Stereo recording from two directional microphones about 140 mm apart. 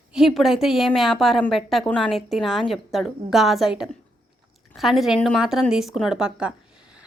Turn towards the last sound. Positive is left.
turn(degrees=-5)  # may be behind; listen again after turning